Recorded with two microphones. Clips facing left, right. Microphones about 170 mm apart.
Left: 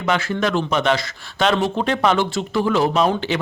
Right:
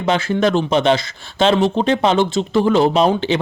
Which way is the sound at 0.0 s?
25° right (ahead or behind).